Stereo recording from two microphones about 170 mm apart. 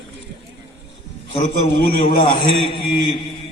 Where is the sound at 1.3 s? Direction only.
35° left (ahead or behind).